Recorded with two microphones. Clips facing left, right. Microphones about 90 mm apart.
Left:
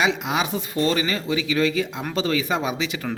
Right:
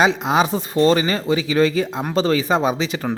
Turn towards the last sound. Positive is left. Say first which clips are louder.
# right 6 dB
turn(degrees=-35)  # may be behind; listen again after turning